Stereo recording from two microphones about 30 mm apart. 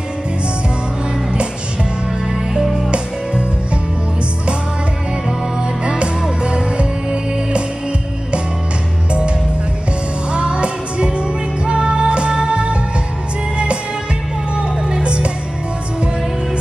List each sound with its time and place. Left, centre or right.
2.9 s music: right
5.6 s music: right
10.3 s music: right
14.5 s music: right